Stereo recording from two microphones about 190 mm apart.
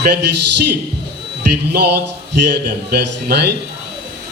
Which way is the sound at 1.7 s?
60° right (ahead or behind).